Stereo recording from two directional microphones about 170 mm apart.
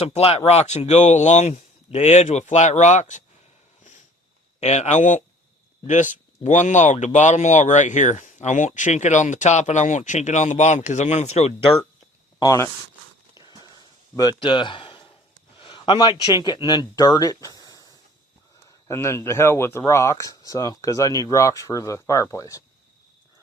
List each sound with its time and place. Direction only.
0.0 s speech: 40° left (ahead or behind)
4.6 s speech: 40° left (ahead or behind)
12.4 s speech: 20° left (ahead or behind)
13.4 s walk: 25° right (ahead or behind)
14.2 s a man's voice: 25° left (ahead or behind)
18.9 s speech: 15° left (ahead or behind)